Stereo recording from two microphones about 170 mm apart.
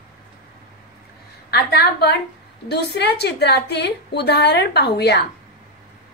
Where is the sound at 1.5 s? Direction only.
70° left (ahead or behind).